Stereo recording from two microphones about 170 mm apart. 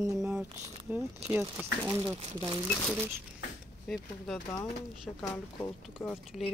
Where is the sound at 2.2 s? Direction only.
30° right (ahead or behind).